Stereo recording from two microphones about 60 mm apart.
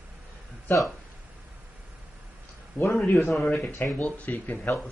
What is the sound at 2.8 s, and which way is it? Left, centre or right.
Speech, left.